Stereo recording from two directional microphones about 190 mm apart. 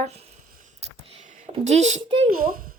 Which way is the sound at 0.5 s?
40° right (ahead or behind).